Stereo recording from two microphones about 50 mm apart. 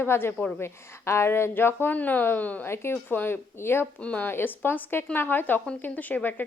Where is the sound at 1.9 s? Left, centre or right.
Left.